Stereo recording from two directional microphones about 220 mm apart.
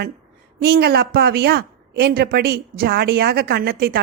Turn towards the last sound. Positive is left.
turn(degrees=-45)  # may be behind; listen again after turning